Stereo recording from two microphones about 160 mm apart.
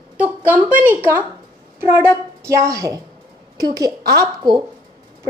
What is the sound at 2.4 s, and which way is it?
Speech, 20° right (ahead or behind).